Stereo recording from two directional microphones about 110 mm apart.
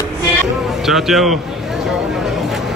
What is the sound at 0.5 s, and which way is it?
Chatter, 5° right (ahead or behind).